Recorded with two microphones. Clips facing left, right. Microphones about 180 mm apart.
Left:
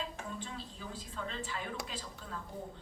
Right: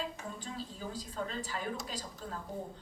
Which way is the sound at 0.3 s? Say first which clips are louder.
Right 2 dB; 40° right (ahead or behind).